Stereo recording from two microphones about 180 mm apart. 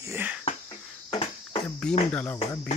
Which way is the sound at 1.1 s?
30° left (ahead or behind).